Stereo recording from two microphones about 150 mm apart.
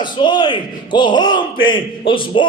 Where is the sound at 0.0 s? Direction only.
30° left (ahead or behind).